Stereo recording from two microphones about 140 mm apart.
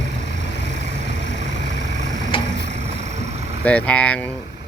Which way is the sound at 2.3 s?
40° left (ahead or behind).